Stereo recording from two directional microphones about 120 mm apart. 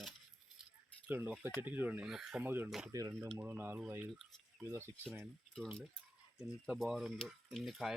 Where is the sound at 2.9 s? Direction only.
30° right (ahead or behind).